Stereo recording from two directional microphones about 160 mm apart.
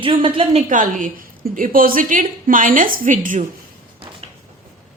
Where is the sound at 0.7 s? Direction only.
55° right (ahead or behind).